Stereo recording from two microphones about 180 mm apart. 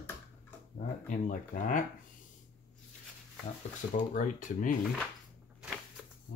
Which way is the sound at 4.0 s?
45° left (ahead or behind).